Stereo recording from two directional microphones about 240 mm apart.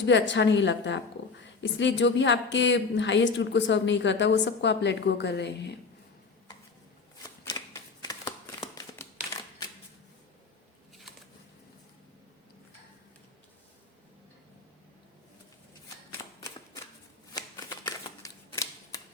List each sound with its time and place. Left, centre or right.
0.0 s a woman's voice: left
7.2 s shuffling cards: centre
16.2 s typewriter: centre
17.3 s shuffling cards: centre